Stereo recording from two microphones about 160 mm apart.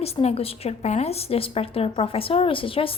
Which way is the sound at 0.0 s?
40° left (ahead or behind).